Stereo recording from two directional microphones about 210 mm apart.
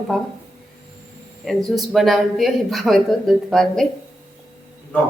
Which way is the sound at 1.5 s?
Centre (ahead or behind).